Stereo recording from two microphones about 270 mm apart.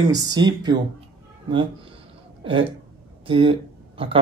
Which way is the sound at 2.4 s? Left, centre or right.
Centre.